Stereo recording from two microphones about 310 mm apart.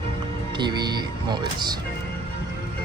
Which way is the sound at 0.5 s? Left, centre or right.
Centre.